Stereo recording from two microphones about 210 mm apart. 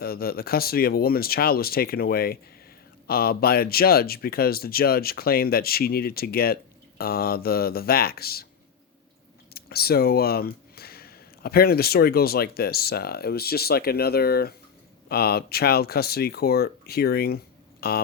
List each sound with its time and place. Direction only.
0.0 s speech: 45° left (ahead or behind)
9.5 s speech: 45° left (ahead or behind)